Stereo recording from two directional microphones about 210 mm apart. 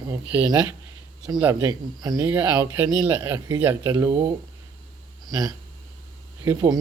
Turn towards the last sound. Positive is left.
turn(degrees=-10)  # may be behind; listen again after turning